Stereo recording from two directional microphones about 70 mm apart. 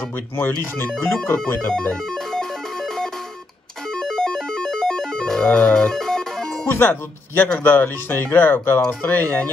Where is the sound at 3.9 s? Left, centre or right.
Centre.